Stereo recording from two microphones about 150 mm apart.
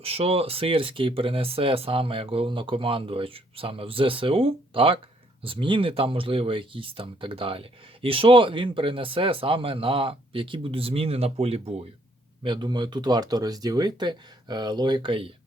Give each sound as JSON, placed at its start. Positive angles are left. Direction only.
{"t": 0.0, "sound": "speech", "side_deg": -40}
{"t": 12.4, "sound": "speech", "side_deg": -30}